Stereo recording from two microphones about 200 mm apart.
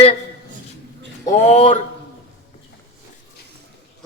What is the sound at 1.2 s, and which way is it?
Speech, 30° left (ahead or behind).